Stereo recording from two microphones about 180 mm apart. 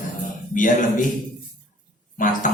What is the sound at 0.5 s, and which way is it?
Speech, 45° left (ahead or behind).